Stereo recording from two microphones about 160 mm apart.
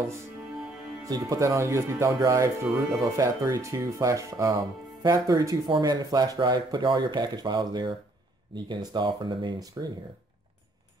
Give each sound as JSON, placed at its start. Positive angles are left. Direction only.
{"t": 1.0, "sound": "speech", "side_deg": -20}